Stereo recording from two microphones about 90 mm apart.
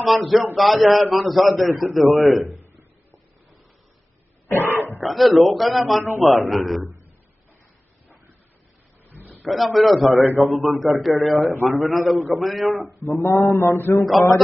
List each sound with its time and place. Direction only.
0.0 s a man's voice: centre (ahead or behind)
2.4 s a sound: 30° right (ahead or behind)
4.5 s dog: 30° left (ahead or behind)
5.0 s a man's voice: centre (ahead or behind)
9.1 s a sound: 20° right (ahead or behind)
9.4 s a man's voice: centre (ahead or behind)
13.0 s mantra: 35° left (ahead or behind)